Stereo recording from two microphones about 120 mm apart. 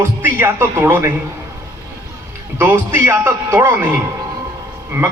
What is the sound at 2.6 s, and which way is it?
A man's voice, 20° right (ahead or behind).